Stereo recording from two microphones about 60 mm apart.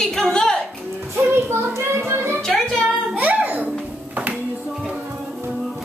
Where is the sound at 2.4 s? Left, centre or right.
Centre.